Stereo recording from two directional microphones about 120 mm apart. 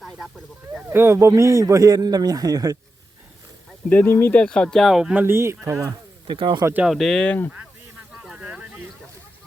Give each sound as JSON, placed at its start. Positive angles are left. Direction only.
{"t": 0.9, "sound": "a man's voice", "side_deg": -20}
{"t": 3.8, "sound": "speech", "side_deg": 15}
{"t": 5.1, "sound": "a man's voice", "side_deg": -20}
{"t": 6.2, "sound": "speech", "side_deg": -40}
{"t": 6.8, "sound": "speech", "side_deg": 0}
{"t": 8.2, "sound": "a sound", "side_deg": -10}